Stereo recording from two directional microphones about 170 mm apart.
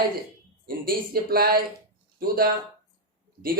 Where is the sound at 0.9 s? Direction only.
60° right (ahead or behind).